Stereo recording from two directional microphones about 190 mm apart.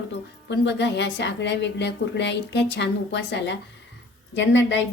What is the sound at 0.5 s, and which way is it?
A woman's voice, 65° left (ahead or behind).